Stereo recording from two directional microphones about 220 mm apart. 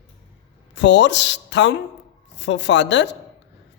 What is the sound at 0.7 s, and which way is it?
Speech, 55° left (ahead or behind).